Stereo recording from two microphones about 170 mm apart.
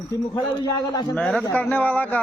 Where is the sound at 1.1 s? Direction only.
5° left (ahead or behind).